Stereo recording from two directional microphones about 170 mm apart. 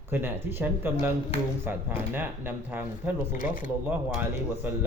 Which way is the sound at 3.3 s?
50° left (ahead or behind).